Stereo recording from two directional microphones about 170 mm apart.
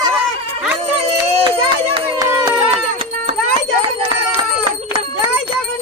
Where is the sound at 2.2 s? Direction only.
20° right (ahead or behind).